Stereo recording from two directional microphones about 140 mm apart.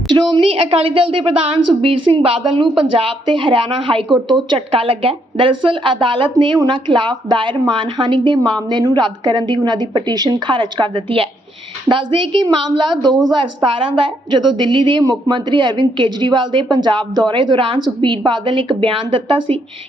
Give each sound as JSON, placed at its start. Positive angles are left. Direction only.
{"t": 0.1, "sound": "a woman's voice", "side_deg": -35}